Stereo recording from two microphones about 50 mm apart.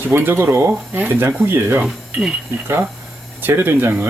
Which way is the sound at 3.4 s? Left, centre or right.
Right.